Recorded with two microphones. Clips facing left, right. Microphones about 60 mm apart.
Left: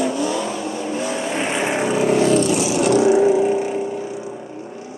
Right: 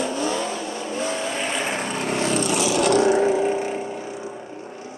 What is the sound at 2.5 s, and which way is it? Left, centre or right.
Vehicle, right.